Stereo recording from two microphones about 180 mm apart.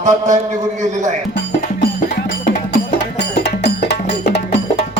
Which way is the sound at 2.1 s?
60° left (ahead or behind).